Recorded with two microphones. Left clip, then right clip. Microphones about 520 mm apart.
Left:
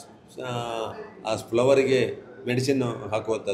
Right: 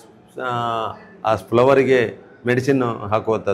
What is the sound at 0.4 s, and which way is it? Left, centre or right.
A man's voice, right.